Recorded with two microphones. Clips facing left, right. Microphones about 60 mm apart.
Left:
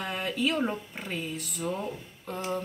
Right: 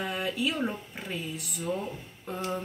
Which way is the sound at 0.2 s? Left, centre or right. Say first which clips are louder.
Left 3 dB; centre.